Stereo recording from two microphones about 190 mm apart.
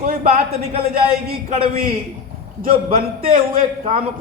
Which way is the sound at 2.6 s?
50° right (ahead or behind).